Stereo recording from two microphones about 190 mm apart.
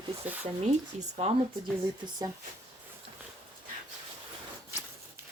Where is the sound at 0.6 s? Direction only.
35° right (ahead or behind).